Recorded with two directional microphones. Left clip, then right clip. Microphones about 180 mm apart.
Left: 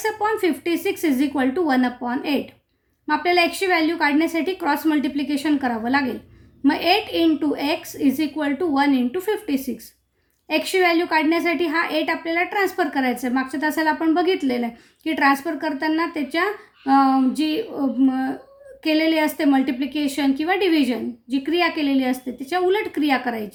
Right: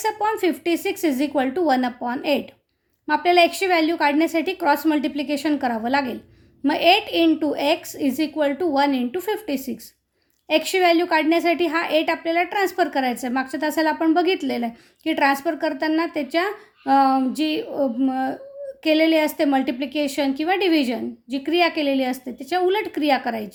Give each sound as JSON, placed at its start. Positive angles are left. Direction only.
{"t": 0.0, "sound": "a woman's voice", "side_deg": -40}